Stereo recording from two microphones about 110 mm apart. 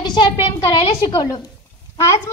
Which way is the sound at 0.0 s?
40° left (ahead or behind).